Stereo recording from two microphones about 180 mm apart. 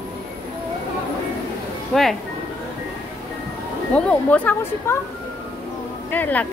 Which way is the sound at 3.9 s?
5° left (ahead or behind).